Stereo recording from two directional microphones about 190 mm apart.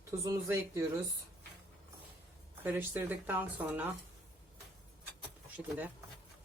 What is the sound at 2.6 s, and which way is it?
Speech, 10° right (ahead or behind).